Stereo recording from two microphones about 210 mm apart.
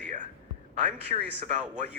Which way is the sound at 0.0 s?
35° right (ahead or behind).